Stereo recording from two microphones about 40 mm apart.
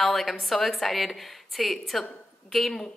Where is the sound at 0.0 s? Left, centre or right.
Centre.